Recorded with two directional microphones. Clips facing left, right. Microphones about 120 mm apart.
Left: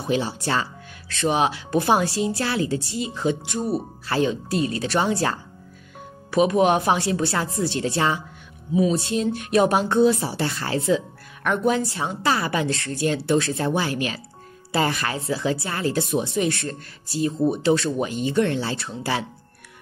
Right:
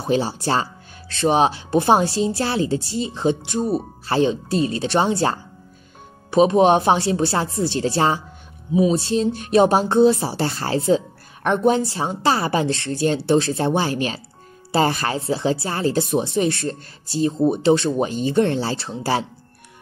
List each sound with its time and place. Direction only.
0.0 s speech: 30° right (ahead or behind)